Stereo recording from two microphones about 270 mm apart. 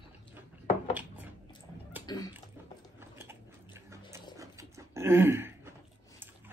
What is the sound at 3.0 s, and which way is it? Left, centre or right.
Biting, centre.